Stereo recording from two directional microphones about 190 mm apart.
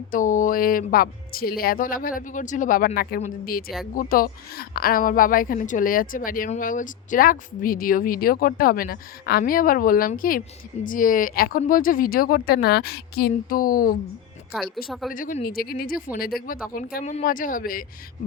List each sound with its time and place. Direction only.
0.1 s a woman's voice: 45° left (ahead or behind)
15.1 s a woman's voice: 45° left (ahead or behind)